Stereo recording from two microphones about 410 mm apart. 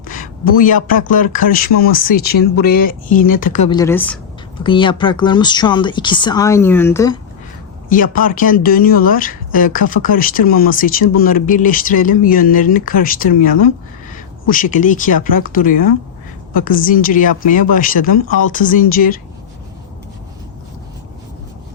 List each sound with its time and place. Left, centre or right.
0.0 s speech: centre
7.9 s speech: centre